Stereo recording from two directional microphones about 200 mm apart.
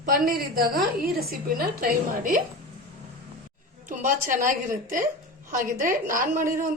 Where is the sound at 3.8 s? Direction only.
40° right (ahead or behind).